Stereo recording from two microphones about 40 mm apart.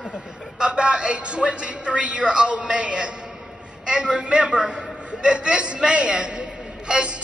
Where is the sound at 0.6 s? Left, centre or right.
Right.